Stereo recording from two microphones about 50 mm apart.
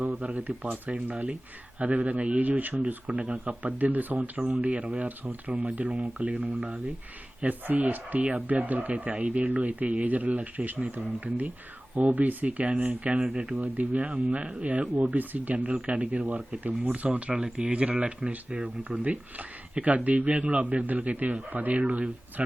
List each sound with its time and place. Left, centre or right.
0.0 s speech: right
4.4 s speech: centre
4.6 s speech: right
6.5 s speech: centre
7.4 s speech: right
8.2 s speech: right
13.6 s speech: right